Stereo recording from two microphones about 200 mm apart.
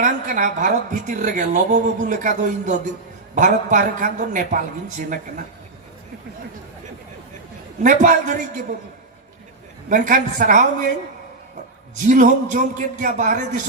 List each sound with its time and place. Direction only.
0.0 s a woman's voice: 40° right (ahead or behind)
7.8 s a woman's voice: 40° right (ahead or behind)
9.9 s a woman's voice: 40° right (ahead or behind)
12.0 s a woman's voice: 40° right (ahead or behind)